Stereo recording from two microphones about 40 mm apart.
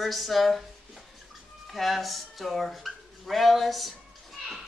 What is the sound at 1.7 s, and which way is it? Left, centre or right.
Speech, centre.